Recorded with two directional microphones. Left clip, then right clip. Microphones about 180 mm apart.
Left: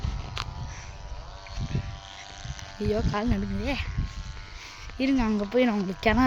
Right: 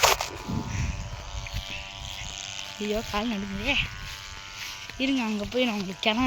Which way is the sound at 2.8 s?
25° left (ahead or behind).